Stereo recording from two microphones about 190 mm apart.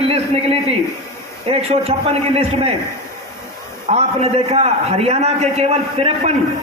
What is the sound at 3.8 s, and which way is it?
A man's voice, 35° right (ahead or behind).